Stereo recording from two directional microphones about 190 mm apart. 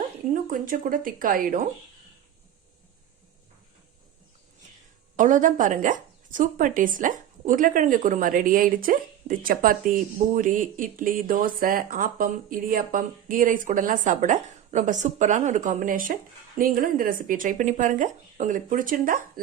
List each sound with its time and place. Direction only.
0.5 s speech: 45° right (ahead or behind)
5.1 s speech: 40° right (ahead or behind)